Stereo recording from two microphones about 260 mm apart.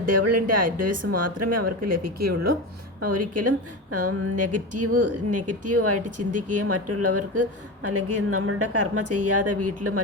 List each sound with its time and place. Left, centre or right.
0.0 s speech: right
3.0 s speech: right